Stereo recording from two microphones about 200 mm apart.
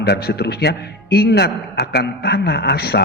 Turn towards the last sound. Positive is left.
turn(degrees=55)  # may be behind; listen again after turning